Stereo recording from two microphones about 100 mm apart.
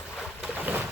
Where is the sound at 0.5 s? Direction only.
15° right (ahead or behind).